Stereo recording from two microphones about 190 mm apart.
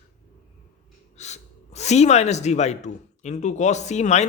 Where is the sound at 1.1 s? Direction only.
35° left (ahead or behind).